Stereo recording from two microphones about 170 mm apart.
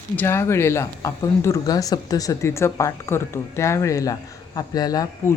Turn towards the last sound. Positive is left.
turn(degrees=20)  # may be behind; listen again after turning